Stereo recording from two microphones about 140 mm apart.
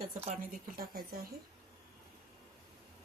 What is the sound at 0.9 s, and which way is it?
Speech, 90° right.